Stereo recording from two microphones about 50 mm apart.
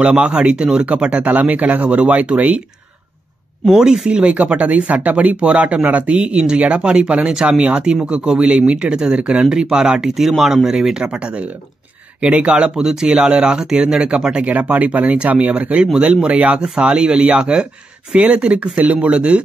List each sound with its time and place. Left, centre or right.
0.0 s speech: right
3.6 s speech: centre
4.2 s speech: right
11.1 s speech: right
14.5 s speech: right